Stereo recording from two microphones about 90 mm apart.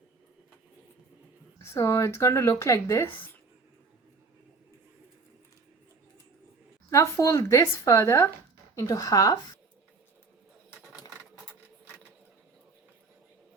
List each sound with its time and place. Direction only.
1.7 s speech: 30° left (ahead or behind)
6.9 s speech: 35° left (ahead or behind)